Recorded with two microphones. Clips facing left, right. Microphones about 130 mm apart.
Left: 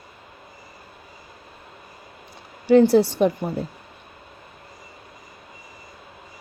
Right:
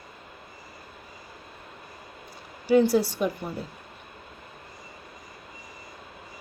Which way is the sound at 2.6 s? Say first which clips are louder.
Left 5 dB; 50° left (ahead or behind).